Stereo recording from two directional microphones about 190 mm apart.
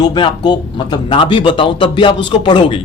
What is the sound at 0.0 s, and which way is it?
Speech, 25° left (ahead or behind).